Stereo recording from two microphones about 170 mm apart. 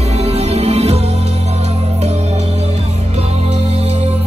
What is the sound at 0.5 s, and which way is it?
Music, 40° right (ahead or behind).